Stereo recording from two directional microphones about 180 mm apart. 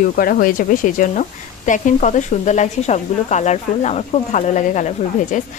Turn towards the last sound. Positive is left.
turn(degrees=45)  # may be behind; listen again after turning